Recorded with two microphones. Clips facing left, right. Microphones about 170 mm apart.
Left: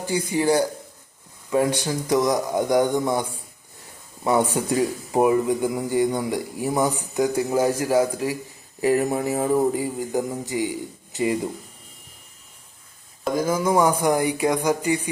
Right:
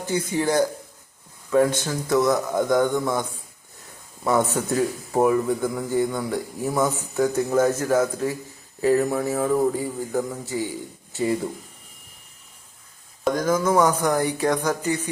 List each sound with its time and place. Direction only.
0.0 s speech: 10° left (ahead or behind)
13.2 s speech: 10° left (ahead or behind)